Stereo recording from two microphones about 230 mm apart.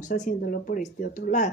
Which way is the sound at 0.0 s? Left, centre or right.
Left.